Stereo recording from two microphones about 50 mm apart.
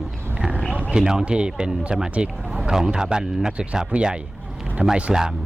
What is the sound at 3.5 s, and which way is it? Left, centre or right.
Speech, right.